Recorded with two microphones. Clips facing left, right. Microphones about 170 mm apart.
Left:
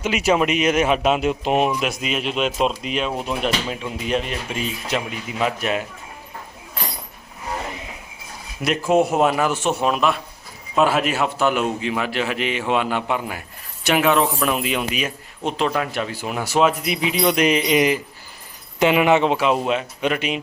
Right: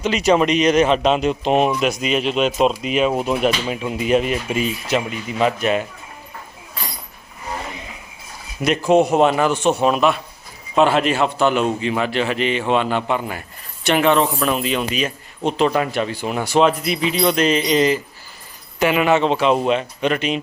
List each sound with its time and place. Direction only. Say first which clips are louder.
0.0 s speech: right 3 dB; 10° left (ahead or behind)
8.6 s speech: right 3 dB; centre (ahead or behind)